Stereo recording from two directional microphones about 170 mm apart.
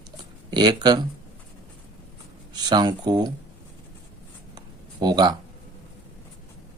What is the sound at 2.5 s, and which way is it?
Speech, 25° right (ahead or behind).